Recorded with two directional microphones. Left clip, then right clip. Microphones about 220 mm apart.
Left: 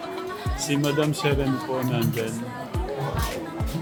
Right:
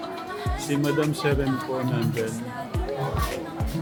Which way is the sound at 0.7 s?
10° left (ahead or behind).